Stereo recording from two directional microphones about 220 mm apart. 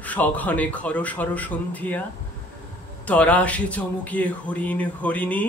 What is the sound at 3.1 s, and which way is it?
Speech, 5° left (ahead or behind).